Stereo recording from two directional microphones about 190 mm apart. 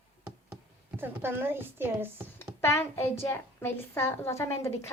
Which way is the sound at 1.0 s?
10° right (ahead or behind).